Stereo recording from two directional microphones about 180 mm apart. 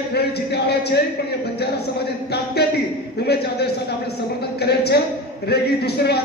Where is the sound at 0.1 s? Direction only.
65° left (ahead or behind).